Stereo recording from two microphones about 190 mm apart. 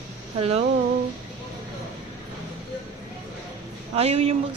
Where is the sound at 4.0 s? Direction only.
30° right (ahead or behind).